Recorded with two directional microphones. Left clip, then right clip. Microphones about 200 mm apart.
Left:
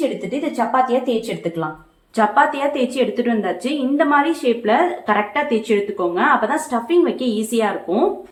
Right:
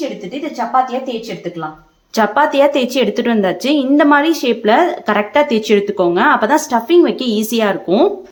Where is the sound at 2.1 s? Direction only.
60° right (ahead or behind).